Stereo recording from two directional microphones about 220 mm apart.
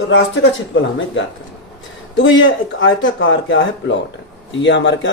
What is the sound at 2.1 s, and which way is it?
Speech, 60° left (ahead or behind).